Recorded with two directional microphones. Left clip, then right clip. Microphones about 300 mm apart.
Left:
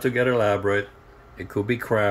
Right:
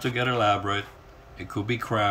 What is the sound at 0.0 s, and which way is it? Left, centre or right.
Speech, centre.